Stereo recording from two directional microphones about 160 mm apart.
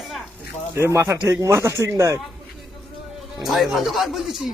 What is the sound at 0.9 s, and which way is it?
Speech, 15° right (ahead or behind).